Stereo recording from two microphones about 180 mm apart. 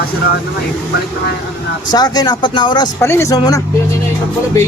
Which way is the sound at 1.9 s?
20° left (ahead or behind).